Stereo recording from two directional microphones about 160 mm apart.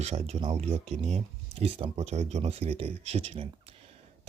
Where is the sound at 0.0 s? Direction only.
40° right (ahead or behind).